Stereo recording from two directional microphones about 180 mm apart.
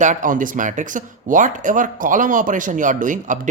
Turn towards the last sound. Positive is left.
turn(degrees=-45)  # may be behind; listen again after turning